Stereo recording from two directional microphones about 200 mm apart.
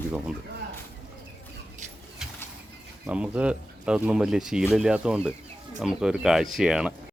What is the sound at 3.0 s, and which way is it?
Speech, 5° right (ahead or behind).